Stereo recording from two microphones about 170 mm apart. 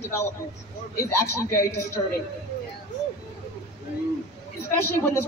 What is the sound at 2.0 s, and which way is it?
Speech, 20° left (ahead or behind).